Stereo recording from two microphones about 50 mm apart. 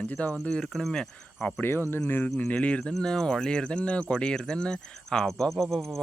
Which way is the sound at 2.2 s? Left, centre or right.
Left.